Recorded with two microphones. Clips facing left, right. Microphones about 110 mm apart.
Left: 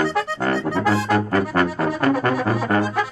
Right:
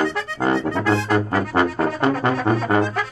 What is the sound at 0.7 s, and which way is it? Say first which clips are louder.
Music: even; 5° left (ahead or behind).